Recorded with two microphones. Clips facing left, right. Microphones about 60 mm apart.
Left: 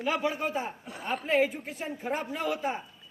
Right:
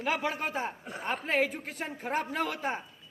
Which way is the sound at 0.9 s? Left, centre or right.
Right.